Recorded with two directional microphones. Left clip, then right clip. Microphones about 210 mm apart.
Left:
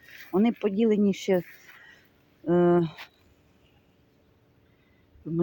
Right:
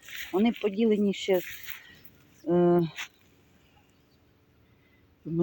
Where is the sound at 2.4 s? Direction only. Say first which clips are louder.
Left 1 dB; centre (ahead or behind).